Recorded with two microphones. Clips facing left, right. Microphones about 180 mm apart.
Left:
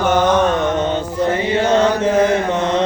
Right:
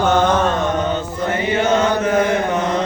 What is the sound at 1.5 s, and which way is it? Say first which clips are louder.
Chant: even; 30° left (ahead or behind).